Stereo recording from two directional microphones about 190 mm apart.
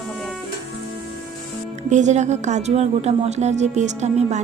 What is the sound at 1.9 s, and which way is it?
A woman's voice, 40° right (ahead or behind).